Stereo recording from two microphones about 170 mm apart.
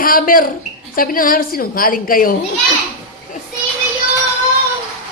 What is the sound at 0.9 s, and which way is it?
A woman's voice, 55° left (ahead or behind).